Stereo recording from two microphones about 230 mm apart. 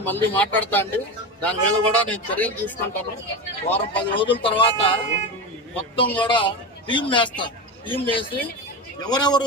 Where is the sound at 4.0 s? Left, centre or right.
Left.